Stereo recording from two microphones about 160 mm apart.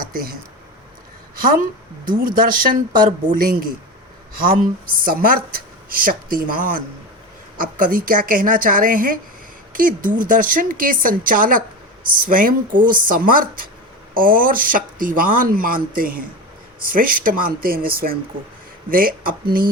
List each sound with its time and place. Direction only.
0.0 s speech: 65° right (ahead or behind)
1.4 s speech: 65° right (ahead or behind)